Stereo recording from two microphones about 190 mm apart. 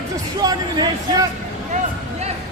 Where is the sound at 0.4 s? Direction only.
20° right (ahead or behind).